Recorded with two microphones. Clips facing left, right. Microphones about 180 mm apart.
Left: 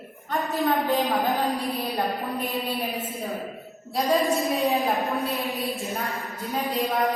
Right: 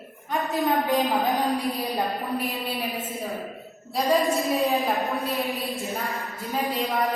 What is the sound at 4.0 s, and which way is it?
A woman's voice, centre (ahead or behind).